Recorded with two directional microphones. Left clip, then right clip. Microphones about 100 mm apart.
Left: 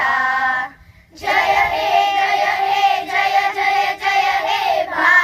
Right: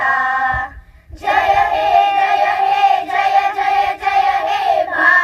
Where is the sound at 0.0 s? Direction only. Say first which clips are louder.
Right 1 dB; 25° left (ahead or behind).